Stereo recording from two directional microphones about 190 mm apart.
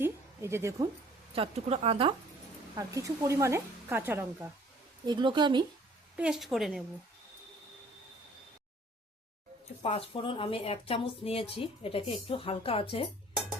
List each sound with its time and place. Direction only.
0.0 s a sound: 15° right (ahead or behind)
1.4 s a woman's voice: 30° right (ahead or behind)
2.7 s speech: 15° right (ahead or behind)
5.0 s a woman's voice: 25° right (ahead or behind)
6.1 s a woman's voice: 5° right (ahead or behind)
9.8 s a woman's voice: 30° left (ahead or behind)